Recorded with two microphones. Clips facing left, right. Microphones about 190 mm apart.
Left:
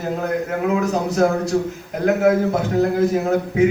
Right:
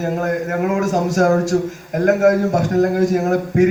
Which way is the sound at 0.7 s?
45° right (ahead or behind).